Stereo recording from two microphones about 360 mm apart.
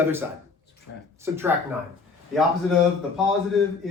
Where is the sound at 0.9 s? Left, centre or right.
Left.